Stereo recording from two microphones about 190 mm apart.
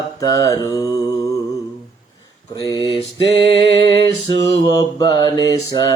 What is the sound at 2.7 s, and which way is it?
Mantra, 15° right (ahead or behind).